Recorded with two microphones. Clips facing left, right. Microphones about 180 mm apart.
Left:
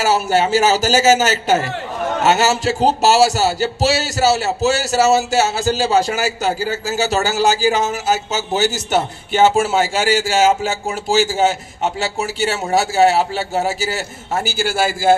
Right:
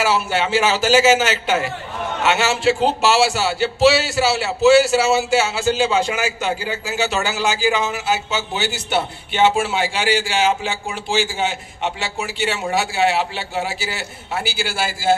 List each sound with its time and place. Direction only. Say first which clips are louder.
0.0 s speech: left 3 dB; 40° left (ahead or behind)